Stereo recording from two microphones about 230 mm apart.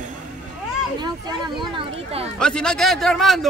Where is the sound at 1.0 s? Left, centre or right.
Centre.